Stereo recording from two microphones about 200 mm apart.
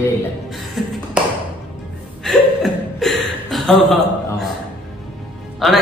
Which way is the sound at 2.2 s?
Centre (ahead or behind).